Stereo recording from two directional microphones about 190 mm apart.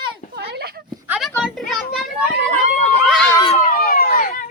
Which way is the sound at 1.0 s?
5° right (ahead or behind).